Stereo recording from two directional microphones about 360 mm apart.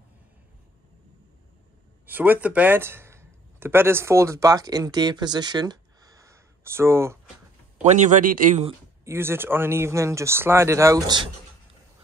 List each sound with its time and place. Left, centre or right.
2.0 s speech: centre
7.8 s speech: right
9.0 s speech: centre